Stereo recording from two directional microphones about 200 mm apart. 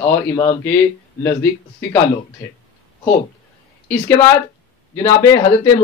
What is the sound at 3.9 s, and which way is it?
Speech, 15° left (ahead or behind).